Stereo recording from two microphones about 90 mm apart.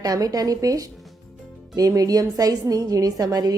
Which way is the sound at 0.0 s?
40° right (ahead or behind).